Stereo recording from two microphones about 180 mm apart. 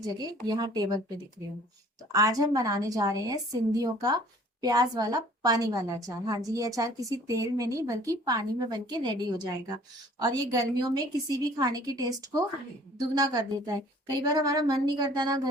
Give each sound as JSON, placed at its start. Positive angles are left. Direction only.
{"t": 0.0, "sound": "a woman's voice", "side_deg": -20}
{"t": 2.1, "sound": "a woman's voice", "side_deg": -20}